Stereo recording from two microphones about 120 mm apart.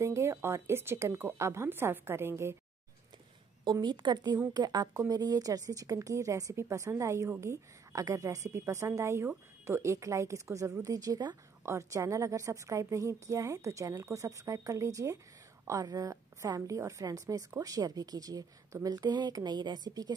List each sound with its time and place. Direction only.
0.0 s speech: 25° right (ahead or behind)
3.8 s a woman's voice: 40° right (ahead or behind)